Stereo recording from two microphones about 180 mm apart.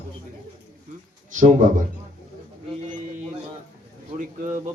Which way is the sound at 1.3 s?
45° right (ahead or behind).